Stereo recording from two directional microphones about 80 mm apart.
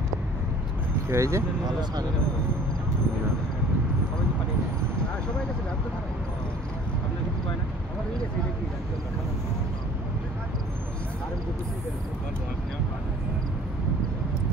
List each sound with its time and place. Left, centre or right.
1.0 s speech: right